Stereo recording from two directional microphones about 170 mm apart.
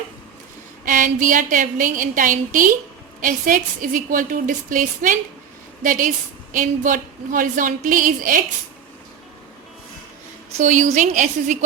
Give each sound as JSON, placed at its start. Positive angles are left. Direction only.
{"t": 0.9, "sound": "a woman's voice", "side_deg": -50}
{"t": 10.6, "sound": "a woman's voice", "side_deg": -45}